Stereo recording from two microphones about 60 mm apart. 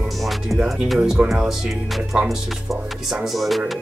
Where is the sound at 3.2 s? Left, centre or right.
Centre.